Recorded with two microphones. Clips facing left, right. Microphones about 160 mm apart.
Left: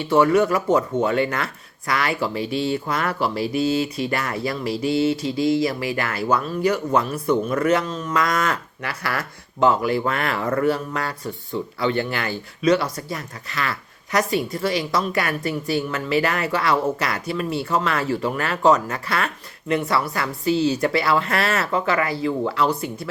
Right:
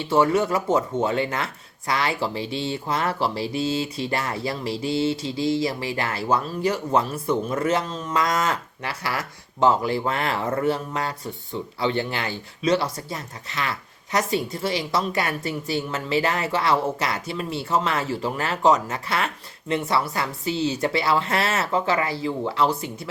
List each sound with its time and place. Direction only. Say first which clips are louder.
0.1 s speech: left 3 dB; 25° right (ahead or behind)